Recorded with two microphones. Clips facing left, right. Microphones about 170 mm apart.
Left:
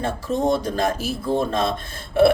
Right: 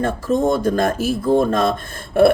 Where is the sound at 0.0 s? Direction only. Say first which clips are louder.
Right 4 dB; 50° right (ahead or behind).